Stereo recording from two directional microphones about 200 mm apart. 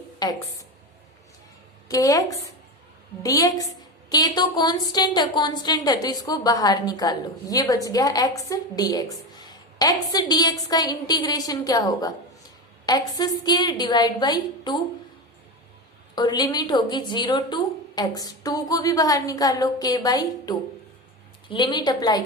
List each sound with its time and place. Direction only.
0.2 s a woman's voice: 20° left (ahead or behind)
1.9 s a woman's voice: 15° left (ahead or behind)
16.1 s a woman's voice: 20° left (ahead or behind)